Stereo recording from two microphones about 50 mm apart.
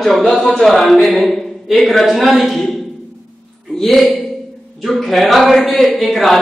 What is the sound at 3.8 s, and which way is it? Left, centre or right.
A man's voice, centre.